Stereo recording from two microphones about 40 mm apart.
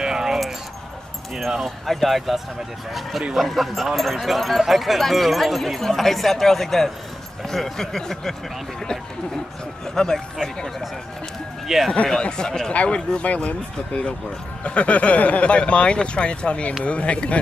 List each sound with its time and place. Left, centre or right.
0.0 s keys jangling: centre
1.3 s speech: centre
9.9 s speech: centre
11.6 s speech: centre
12.2 s speech: centre